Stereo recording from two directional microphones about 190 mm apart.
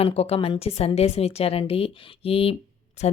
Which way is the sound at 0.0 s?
30° left (ahead or behind).